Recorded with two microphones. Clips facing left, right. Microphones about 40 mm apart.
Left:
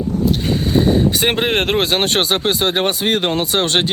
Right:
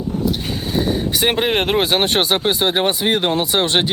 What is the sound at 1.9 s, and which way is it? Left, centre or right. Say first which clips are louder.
Speech: even; centre.